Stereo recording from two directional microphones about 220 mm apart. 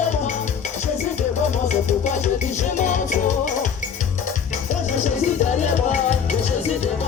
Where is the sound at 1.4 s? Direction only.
35° left (ahead or behind).